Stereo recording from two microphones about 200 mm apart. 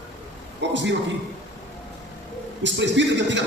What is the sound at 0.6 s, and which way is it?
Speech, 65° right (ahead or behind).